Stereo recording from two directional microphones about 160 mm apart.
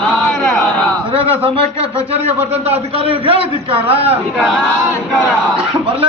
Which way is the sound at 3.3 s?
35° right (ahead or behind).